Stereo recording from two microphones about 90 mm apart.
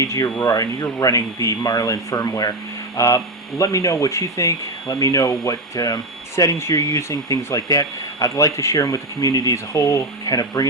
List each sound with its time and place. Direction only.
0.0 s speech: 40° left (ahead or behind)